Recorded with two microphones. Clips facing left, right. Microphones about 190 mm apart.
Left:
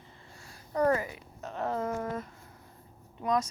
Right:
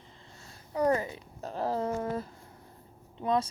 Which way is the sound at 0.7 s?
10° right (ahead or behind).